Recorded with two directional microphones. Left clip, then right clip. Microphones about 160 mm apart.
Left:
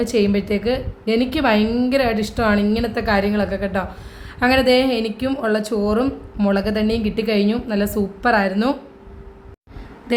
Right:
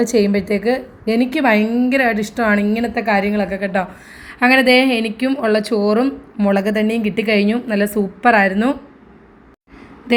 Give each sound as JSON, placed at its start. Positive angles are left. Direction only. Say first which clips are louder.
{"t": 0.0, "sound": "a woman's voice", "louder": "right 3 dB", "side_deg": -10}
{"t": 6.5, "sound": "a woman's voice", "louder": "right 3 dB", "side_deg": -10}